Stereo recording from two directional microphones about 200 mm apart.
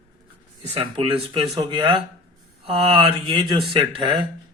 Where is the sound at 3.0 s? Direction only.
25° right (ahead or behind).